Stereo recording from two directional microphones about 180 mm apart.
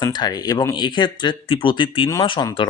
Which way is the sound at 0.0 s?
20° left (ahead or behind).